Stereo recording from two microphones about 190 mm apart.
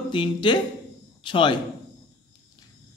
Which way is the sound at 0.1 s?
25° left (ahead or behind).